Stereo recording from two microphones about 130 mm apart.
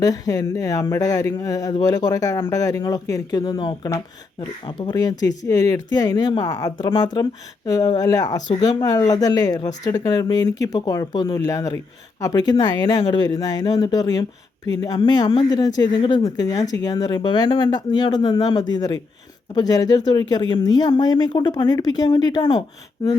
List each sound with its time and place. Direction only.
0.0 s speech: 30° left (ahead or behind)